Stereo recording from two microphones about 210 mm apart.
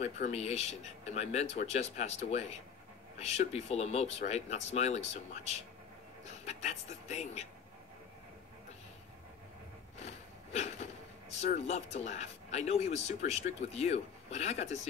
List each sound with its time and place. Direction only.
0.0 s speech: 30° left (ahead or behind)
9.9 s speech: 30° left (ahead or behind)